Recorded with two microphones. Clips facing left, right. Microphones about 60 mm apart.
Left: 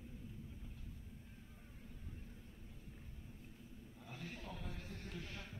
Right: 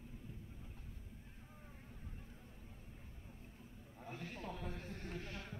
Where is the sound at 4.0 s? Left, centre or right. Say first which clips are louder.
Right 4 dB; right.